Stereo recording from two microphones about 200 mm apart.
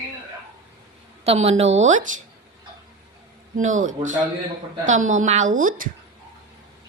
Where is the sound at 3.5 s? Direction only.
40° right (ahead or behind).